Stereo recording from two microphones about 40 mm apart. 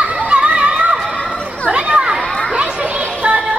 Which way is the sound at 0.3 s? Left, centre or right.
Right.